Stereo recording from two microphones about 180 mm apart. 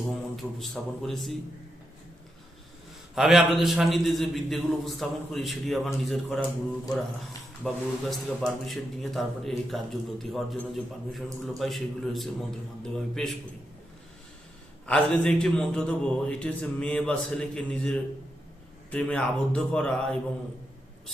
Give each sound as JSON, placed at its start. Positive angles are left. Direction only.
{"t": 0.1, "sound": "a man's voice", "side_deg": 0}
{"t": 3.2, "sound": "a man's voice", "side_deg": 0}
{"t": 7.6, "sound": "a man's voice", "side_deg": 5}
{"t": 14.8, "sound": "a man's voice", "side_deg": 5}